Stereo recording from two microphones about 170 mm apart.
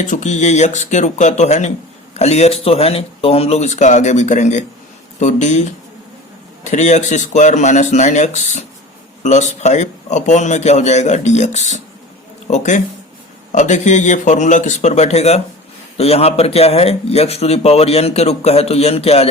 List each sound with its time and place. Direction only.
0.0 s a man's voice: 45° left (ahead or behind)